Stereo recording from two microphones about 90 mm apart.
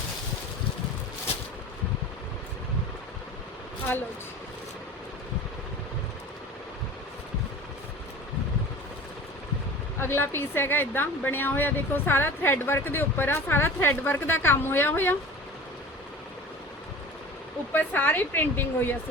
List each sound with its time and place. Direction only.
10.0 s a woman's voice: 25° left (ahead or behind)
17.7 s a woman's voice: 20° left (ahead or behind)